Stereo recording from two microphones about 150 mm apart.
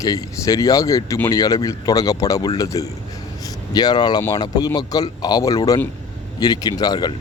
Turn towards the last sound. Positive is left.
turn(degrees=25)  # may be behind; listen again after turning